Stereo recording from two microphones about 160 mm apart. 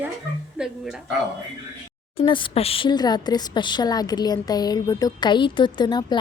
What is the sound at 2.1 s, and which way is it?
A woman's voice, 30° left (ahead or behind).